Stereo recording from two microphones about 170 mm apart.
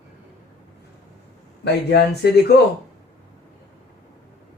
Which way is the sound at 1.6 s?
75° left (ahead or behind).